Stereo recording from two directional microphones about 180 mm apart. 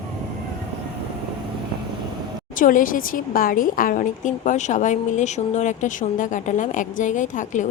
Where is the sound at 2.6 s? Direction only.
50° left (ahead or behind).